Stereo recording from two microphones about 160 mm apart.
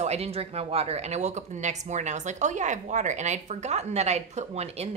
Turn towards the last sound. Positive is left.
turn(degrees=-40)  # may be behind; listen again after turning